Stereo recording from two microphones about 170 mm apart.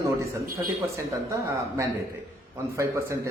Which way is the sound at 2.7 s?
15° right (ahead or behind).